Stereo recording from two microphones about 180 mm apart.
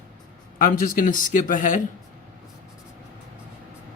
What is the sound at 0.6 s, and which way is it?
Speech, 50° left (ahead or behind).